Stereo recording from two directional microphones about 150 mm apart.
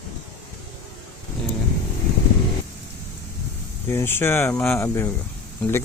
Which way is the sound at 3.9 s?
15° left (ahead or behind).